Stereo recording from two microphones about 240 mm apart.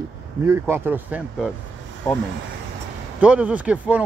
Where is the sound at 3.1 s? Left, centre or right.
Centre.